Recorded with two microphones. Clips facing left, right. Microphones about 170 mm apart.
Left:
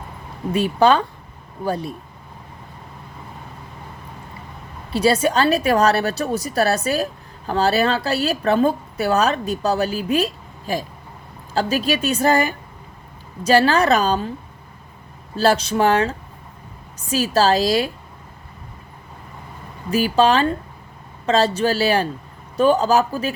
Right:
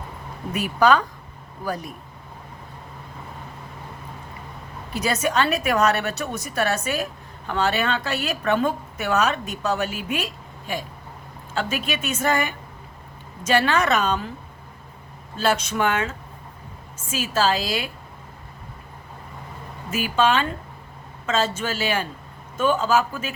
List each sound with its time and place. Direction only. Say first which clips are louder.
0.5 s speech: left 3 dB; 30° left (ahead or behind)
4.9 s a woman's voice: left 7 dB; 30° left (ahead or behind)
15.4 s a woman's voice: left 5 dB; 35° left (ahead or behind)
19.9 s a woman's voice: left 5 dB; 35° left (ahead or behind)